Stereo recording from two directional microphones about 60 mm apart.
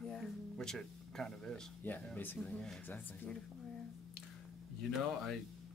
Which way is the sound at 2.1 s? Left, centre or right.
Left.